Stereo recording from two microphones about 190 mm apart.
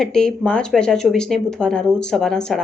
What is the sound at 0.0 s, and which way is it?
Speech, 5° left (ahead or behind).